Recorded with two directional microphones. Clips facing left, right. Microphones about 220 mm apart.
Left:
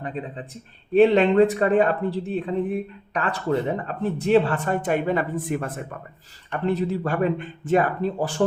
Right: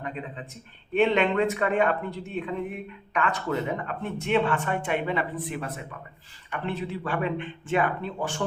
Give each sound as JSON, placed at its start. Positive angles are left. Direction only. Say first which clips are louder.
{"t": 0.0, "sound": "speech", "louder": "left 4 dB", "side_deg": 35}